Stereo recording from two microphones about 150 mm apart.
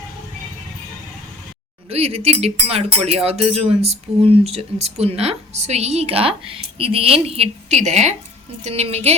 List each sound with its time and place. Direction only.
1.9 s speech: 40° right (ahead or behind)